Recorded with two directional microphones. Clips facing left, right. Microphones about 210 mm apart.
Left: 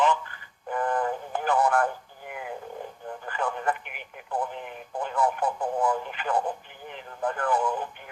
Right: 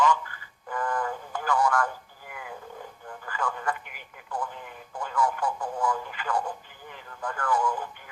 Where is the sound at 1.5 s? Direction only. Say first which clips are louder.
Left 2 dB; 60° left (ahead or behind).